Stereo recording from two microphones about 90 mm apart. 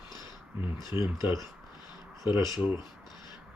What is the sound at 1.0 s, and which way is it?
Speech, 55° left (ahead or behind).